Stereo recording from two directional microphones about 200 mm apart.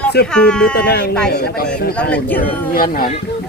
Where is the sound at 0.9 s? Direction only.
55° left (ahead or behind).